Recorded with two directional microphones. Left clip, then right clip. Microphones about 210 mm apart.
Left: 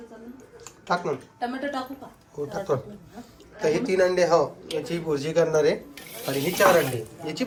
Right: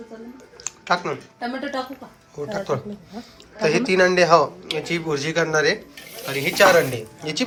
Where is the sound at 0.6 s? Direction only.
15° left (ahead or behind).